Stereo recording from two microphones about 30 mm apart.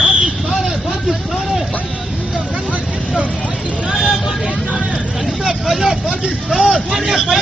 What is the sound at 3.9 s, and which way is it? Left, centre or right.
Vehicle, right.